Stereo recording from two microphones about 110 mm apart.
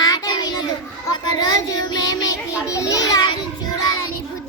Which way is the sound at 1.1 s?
40° left (ahead or behind).